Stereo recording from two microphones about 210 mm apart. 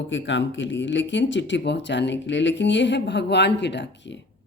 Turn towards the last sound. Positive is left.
turn(degrees=55)  # may be behind; listen again after turning